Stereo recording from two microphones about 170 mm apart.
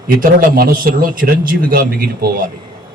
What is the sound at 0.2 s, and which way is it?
A man's voice, 55° right (ahead or behind).